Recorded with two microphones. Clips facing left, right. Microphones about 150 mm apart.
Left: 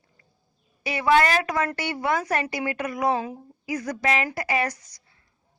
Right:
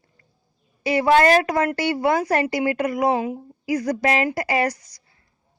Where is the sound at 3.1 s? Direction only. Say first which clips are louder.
Right 5 dB; 20° right (ahead or behind).